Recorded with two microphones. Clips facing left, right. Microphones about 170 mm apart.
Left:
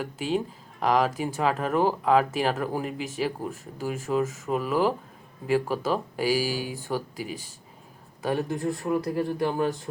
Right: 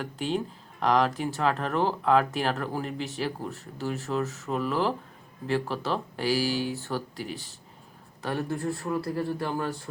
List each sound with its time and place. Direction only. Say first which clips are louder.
0.0 s speech: left 2 dB; 5° left (ahead or behind)